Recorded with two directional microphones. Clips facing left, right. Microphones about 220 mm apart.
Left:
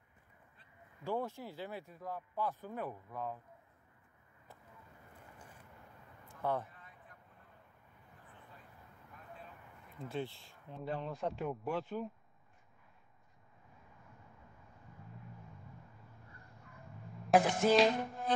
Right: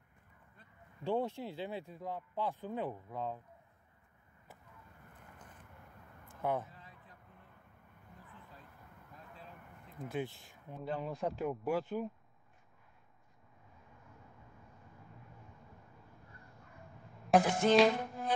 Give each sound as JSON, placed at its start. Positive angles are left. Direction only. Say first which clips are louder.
{"t": 1.0, "sound": "speech", "louder": "right 3 dB", "side_deg": -20}
{"t": 6.4, "sound": "speech", "louder": "right 1 dB", "side_deg": -20}
{"t": 10.0, "sound": "speech", "louder": "right 1 dB", "side_deg": -15}
{"t": 10.7, "sound": "speech", "louder": "right 1 dB", "side_deg": 0}
{"t": 11.4, "sound": "speech", "louder": "right 4 dB", "side_deg": -15}
{"t": 17.3, "sound": "music", "louder": "right 1 dB", "side_deg": 0}